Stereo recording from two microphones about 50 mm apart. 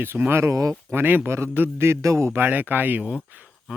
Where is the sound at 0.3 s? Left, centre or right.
Right.